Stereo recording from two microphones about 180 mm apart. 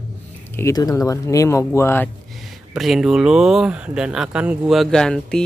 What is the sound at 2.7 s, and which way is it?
Speech, centre (ahead or behind).